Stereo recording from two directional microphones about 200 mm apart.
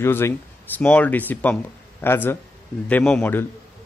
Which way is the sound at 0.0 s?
10° left (ahead or behind).